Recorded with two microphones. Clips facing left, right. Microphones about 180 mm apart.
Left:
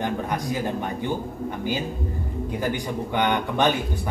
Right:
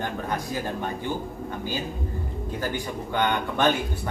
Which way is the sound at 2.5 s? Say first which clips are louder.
Left 3 dB; 15° left (ahead or behind).